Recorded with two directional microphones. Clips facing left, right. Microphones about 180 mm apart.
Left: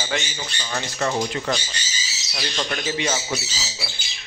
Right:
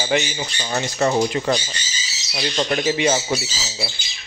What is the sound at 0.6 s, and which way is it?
A man's voice, 25° right (ahead or behind).